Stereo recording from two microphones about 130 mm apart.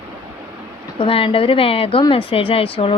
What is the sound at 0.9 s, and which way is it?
A woman's voice, 45° left (ahead or behind).